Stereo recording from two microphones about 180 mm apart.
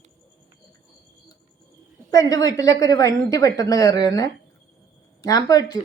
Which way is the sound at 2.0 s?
20° left (ahead or behind).